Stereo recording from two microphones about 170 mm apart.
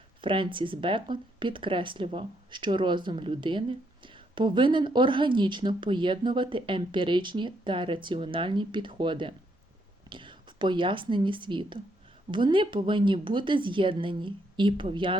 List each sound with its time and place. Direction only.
0.2 s a woman's voice: 30° right (ahead or behind)